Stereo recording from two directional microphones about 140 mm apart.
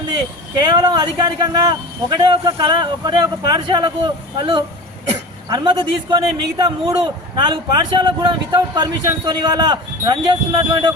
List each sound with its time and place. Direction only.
0.1 s a man's voice: 30° right (ahead or behind)